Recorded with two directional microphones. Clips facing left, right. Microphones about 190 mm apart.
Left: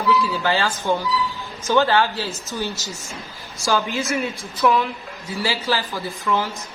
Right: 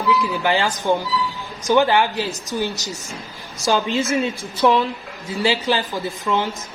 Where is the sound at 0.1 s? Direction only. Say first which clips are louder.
Right 1 dB; 15° right (ahead or behind).